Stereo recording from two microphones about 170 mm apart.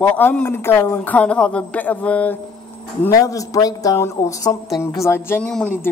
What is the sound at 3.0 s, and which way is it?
A man's voice, 20° left (ahead or behind).